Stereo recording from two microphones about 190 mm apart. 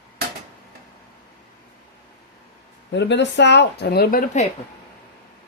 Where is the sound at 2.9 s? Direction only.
65° left (ahead or behind).